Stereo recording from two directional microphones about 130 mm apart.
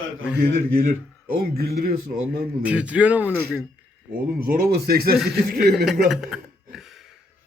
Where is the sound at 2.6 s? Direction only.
10° right (ahead or behind).